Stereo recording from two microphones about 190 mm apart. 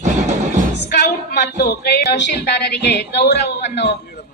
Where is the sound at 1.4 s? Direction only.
55° left (ahead or behind).